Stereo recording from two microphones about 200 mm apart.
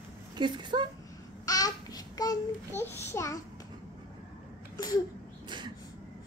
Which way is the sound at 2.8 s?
10° left (ahead or behind).